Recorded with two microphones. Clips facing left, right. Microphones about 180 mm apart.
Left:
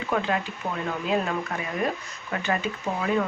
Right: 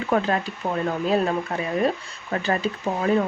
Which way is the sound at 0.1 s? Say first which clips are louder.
Right 4 dB; 40° right (ahead or behind).